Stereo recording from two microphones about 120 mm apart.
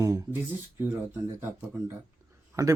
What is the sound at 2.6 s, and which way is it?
Speech, 30° right (ahead or behind).